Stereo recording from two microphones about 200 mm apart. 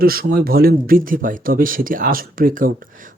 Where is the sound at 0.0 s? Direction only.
45° right (ahead or behind).